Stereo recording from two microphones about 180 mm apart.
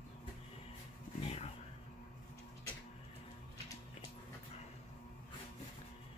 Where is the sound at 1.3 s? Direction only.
35° left (ahead or behind).